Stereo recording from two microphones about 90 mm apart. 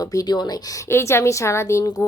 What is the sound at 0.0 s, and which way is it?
Speech, 40° left (ahead or behind).